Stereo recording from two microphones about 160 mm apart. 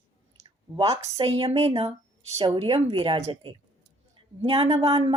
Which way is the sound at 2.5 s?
35° right (ahead or behind).